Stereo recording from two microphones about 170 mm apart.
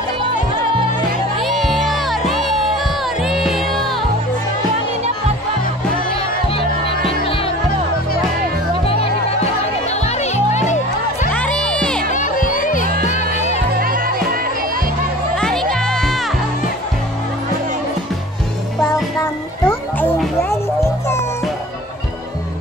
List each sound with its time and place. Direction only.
1.4 s music: centre (ahead or behind)
8.8 s music: 35° left (ahead or behind)
11.3 s music: 5° left (ahead or behind)
12.1 s music: 50° left (ahead or behind)
13.7 s music: 60° right (ahead or behind)
15.3 s music: 5° left (ahead or behind)
19.6 s music: 10° left (ahead or behind)